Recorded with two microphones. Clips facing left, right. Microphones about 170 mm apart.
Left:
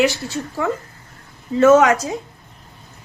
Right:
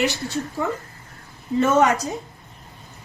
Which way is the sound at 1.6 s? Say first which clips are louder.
Left 7 dB; 90° left.